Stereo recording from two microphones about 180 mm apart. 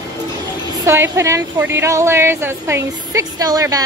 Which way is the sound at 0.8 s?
15° right (ahead or behind).